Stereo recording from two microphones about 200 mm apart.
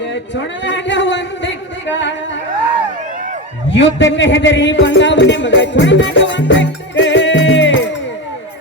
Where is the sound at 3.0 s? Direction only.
40° right (ahead or behind).